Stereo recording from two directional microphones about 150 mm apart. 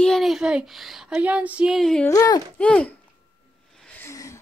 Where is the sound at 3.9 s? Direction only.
20° left (ahead or behind).